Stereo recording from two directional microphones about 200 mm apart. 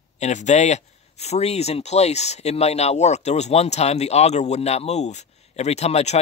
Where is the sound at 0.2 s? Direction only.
35° left (ahead or behind).